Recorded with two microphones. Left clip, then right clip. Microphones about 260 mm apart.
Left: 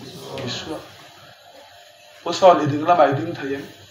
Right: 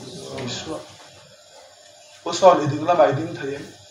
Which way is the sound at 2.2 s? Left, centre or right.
Left.